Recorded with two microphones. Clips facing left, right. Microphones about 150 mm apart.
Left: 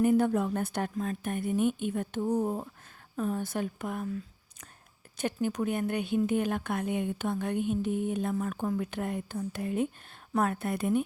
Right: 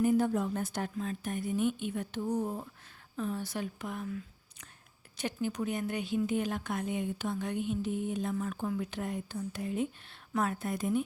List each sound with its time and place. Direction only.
0.0 s a woman's voice: 60° left (ahead or behind)
4.1 s a sound: 40° left (ahead or behind)
5.1 s a woman's voice: 50° left (ahead or behind)